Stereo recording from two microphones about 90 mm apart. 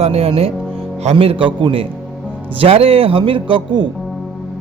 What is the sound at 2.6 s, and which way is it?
A man's voice, 90° right.